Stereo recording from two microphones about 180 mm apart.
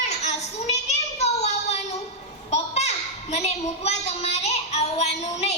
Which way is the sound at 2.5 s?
35° left (ahead or behind).